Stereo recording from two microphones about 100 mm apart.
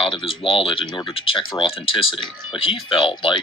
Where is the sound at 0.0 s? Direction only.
65° left (ahead or behind).